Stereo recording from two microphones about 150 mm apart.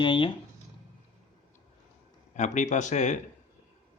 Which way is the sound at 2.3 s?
55° left (ahead or behind).